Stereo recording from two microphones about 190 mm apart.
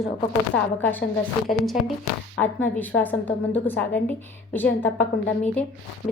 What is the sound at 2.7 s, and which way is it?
Speech, 10° left (ahead or behind).